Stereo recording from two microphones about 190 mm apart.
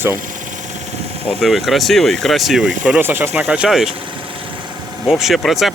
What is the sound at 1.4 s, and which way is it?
Speech, centre (ahead or behind).